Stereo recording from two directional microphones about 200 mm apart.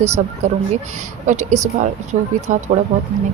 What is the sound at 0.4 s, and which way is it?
Speech, 35° right (ahead or behind).